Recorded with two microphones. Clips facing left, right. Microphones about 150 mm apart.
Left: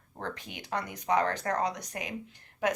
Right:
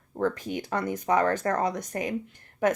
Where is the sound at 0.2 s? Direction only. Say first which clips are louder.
Right 11 dB; 45° right (ahead or behind).